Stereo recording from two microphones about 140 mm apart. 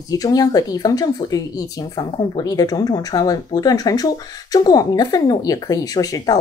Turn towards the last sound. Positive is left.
turn(degrees=25)  # may be behind; listen again after turning